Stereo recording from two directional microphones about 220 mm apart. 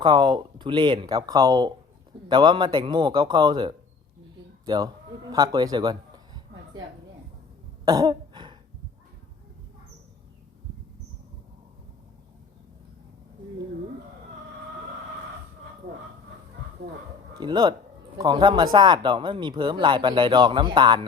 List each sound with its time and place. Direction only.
0.0 s a man's voice: 20° right (ahead or behind)
7.9 s cough: 15° right (ahead or behind)
17.3 s speech: 20° right (ahead or behind)